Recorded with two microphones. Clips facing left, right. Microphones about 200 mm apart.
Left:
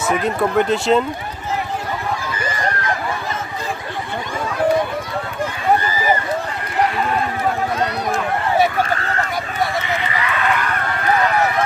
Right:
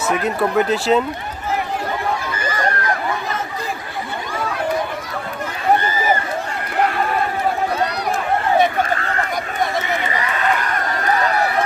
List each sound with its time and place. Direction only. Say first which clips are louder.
0.1 s speech: left 1 dB; centre (ahead or behind)
10.1 s run: even; 35° right (ahead or behind)